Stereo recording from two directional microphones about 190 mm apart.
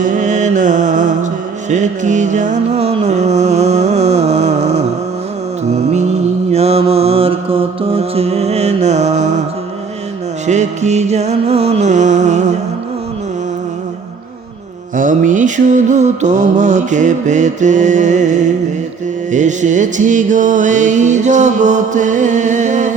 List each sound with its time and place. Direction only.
0.0 s music: 40° right (ahead or behind)
6.5 s mantra: 35° right (ahead or behind)
10.4 s mantra: 40° right (ahead or behind)
14.9 s mantra: 45° right (ahead or behind)